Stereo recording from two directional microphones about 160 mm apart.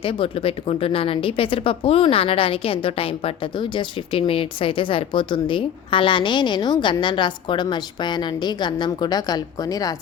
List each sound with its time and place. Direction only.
0.0 s a woman's voice: 35° left (ahead or behind)